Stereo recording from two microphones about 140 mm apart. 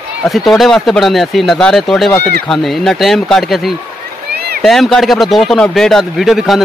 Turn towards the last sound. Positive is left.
turn(degrees=0)  # may be behind; listen again after turning